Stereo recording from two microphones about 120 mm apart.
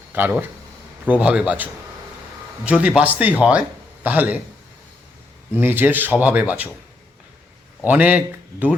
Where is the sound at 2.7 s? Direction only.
10° right (ahead or behind).